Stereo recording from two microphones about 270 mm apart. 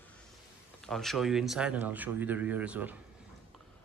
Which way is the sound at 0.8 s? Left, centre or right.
Centre.